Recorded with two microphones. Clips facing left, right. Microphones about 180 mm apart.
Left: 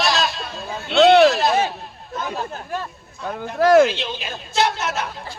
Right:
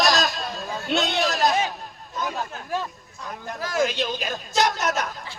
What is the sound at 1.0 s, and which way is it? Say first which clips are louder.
Speech: left 14 dB; 70° left (ahead or behind).